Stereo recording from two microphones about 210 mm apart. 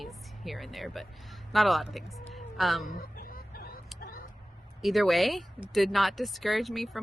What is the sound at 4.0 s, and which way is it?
Vehicle, 45° left (ahead or behind).